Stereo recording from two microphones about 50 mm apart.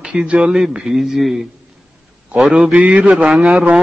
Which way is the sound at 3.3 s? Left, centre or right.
Centre.